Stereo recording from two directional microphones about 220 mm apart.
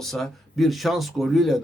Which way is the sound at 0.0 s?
Centre (ahead or behind).